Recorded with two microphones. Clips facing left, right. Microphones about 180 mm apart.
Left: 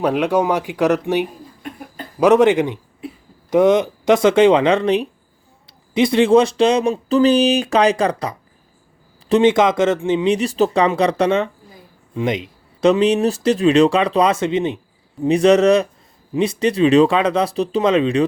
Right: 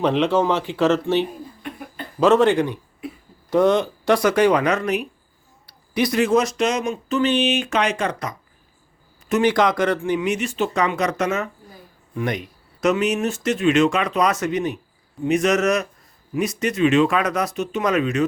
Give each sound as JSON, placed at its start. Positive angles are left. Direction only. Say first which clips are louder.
{"t": 0.0, "sound": "speech", "louder": "left 1 dB", "side_deg": 10}
{"t": 9.3, "sound": "speech", "louder": "left 4 dB", "side_deg": 25}